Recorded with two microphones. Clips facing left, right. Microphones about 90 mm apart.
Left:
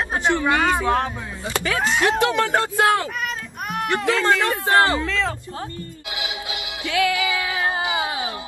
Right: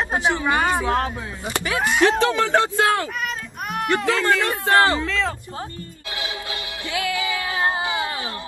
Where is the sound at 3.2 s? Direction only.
Centre (ahead or behind).